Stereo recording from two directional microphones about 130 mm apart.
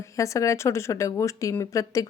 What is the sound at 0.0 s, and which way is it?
A woman's voice, 25° left (ahead or behind).